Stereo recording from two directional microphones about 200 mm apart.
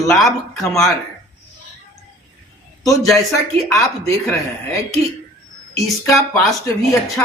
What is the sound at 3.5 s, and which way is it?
Speech, 15° left (ahead or behind).